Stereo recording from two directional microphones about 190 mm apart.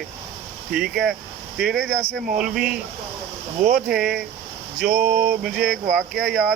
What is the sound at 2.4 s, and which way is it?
Speech, 5° right (ahead or behind).